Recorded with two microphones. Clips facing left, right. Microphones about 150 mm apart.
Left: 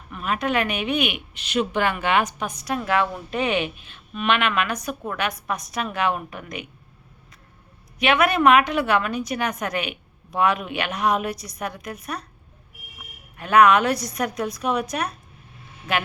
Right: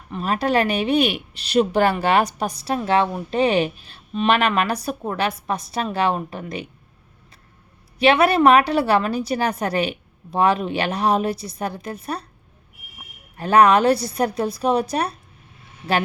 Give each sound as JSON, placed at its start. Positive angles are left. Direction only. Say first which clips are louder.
{"t": 0.1, "sound": "a woman's voice", "louder": "right 4 dB", "side_deg": -35}
{"t": 7.9, "sound": "a woman's voice", "louder": "right 4 dB", "side_deg": -30}
{"t": 13.3, "sound": "a woman's voice", "louder": "right 1 dB", "side_deg": -35}